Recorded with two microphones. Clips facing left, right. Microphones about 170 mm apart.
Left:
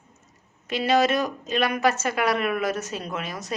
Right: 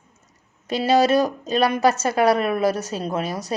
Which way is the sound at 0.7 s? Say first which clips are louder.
Right 4 dB; 35° right (ahead or behind).